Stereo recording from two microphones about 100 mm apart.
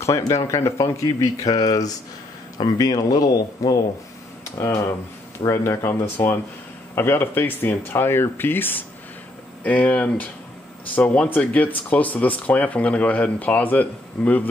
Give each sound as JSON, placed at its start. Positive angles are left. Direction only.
{"t": 0.0, "sound": "speech", "side_deg": 30}
{"t": 5.4, "sound": "speech", "side_deg": 25}